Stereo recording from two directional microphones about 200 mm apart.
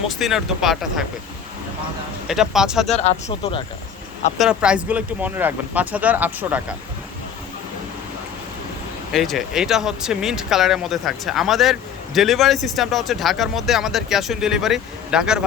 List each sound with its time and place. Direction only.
0.1 s speech: centre (ahead or behind)
2.2 s speech: centre (ahead or behind)
2.9 s speech: 35° left (ahead or behind)
4.4 s speech: 5° right (ahead or behind)
9.1 s speech: centre (ahead or behind)